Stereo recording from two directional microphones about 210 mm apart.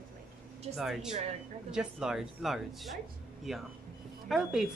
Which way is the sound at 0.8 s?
Centre (ahead or behind).